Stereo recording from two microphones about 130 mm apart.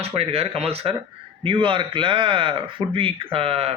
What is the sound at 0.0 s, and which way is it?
A man's voice, 50° right (ahead or behind).